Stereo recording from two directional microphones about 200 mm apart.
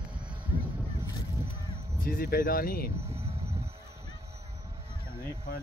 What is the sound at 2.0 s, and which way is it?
Speech, 45° left (ahead or behind).